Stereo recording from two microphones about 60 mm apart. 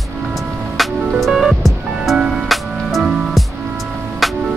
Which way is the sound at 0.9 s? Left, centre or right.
Centre.